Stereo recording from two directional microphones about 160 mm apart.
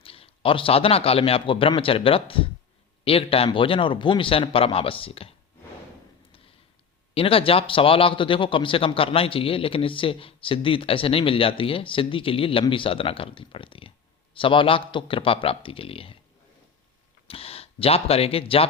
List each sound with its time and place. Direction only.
0.0 s speech: 35° left (ahead or behind)
7.1 s speech: 35° left (ahead or behind)
17.2 s speech: 35° left (ahead or behind)